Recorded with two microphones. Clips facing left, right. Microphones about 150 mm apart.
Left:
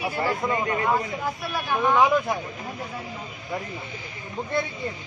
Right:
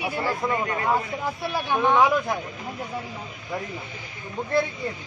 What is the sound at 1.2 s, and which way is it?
Speech, 25° right (ahead or behind).